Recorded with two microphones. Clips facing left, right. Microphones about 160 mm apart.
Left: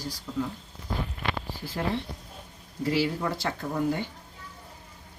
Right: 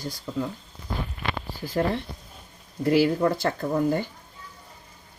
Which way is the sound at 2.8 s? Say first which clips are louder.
Right 6 dB; 55° right (ahead or behind).